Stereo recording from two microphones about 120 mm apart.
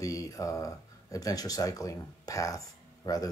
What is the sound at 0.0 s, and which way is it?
Speech, 30° left (ahead or behind).